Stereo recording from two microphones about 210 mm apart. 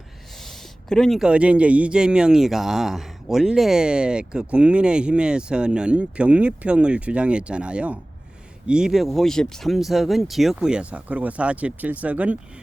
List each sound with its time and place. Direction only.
0.4 s a man's voice: centre (ahead or behind)